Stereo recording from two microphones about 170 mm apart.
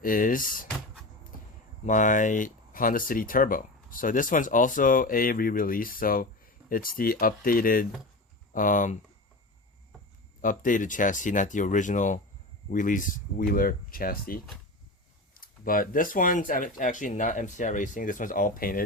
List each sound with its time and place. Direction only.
0.0 s speech: 55° left (ahead or behind)
1.8 s speech: 50° left (ahead or behind)
10.4 s speech: 50° left (ahead or behind)